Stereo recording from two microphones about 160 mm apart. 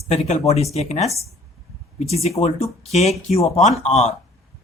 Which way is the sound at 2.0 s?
40° left (ahead or behind).